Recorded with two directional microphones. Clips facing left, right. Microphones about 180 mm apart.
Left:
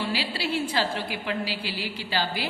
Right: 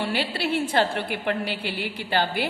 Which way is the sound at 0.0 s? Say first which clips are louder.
Right 3 dB; 55° right (ahead or behind).